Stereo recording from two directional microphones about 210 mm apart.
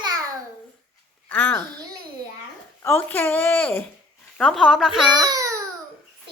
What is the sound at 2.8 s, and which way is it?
A woman's voice, 10° left (ahead or behind).